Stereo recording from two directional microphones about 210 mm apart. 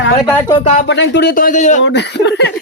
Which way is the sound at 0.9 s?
55° left (ahead or behind).